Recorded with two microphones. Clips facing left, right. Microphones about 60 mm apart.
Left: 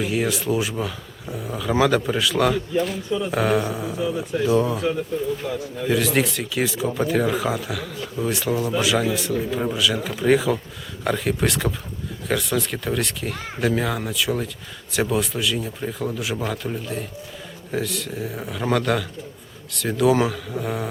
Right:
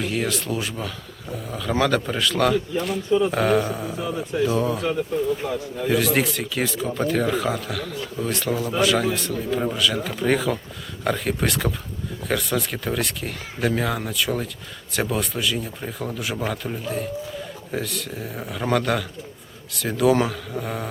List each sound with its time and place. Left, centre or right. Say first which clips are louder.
0.0 s speech: left 2 dB; centre
5.4 s a man's voice: right 1 dB; centre
5.9 s speech: even; centre